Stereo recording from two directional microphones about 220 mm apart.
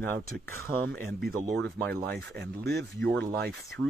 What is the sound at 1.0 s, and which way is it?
Speech, 45° right (ahead or behind).